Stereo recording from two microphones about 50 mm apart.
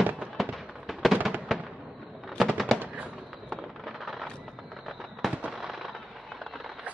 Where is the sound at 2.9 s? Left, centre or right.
Right.